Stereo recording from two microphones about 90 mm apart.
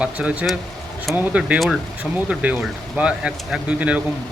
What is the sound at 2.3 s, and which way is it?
Speech, 15° right (ahead or behind).